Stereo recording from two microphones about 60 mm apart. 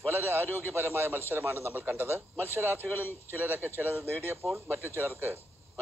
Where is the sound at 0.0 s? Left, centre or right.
Right.